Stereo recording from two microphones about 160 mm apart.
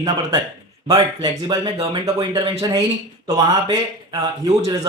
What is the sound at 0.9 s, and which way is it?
Speech, 25° right (ahead or behind).